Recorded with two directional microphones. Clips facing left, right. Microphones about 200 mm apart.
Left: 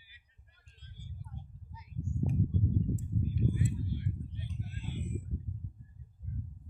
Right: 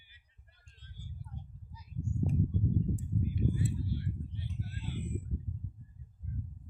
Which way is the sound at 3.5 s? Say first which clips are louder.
Even; 20° left (ahead or behind).